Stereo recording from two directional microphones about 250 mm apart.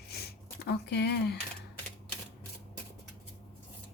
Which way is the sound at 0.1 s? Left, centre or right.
Left.